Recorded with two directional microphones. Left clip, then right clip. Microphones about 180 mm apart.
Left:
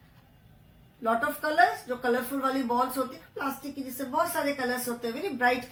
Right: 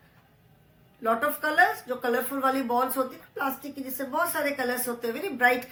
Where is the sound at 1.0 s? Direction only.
20° right (ahead or behind).